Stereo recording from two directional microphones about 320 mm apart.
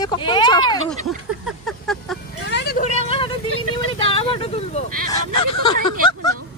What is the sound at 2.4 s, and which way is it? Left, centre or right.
Vehicle, left.